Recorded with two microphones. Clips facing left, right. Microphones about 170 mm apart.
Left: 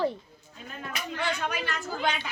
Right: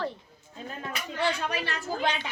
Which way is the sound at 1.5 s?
30° right (ahead or behind).